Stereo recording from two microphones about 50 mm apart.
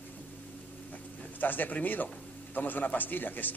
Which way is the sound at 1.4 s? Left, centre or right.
Left.